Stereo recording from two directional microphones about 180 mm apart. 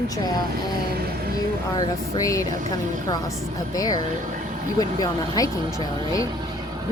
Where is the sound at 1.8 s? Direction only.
20° left (ahead or behind).